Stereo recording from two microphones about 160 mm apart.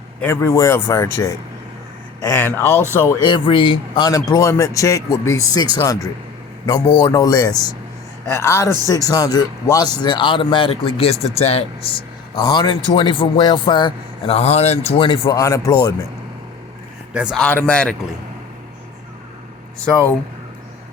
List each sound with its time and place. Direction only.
0.2 s a man's voice: 15° left (ahead or behind)
3.2 s a man's voice: 30° left (ahead or behind)
12.4 s a man's voice: 25° left (ahead or behind)
15.4 s a man's voice: 20° left (ahead or behind)
17.3 s a man's voice: 10° left (ahead or behind)